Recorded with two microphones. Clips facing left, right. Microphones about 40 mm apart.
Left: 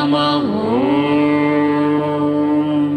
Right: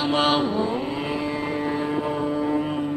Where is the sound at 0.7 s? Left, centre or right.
Left.